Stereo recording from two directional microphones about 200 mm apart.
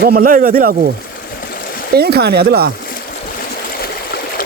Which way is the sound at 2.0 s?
55° right (ahead or behind).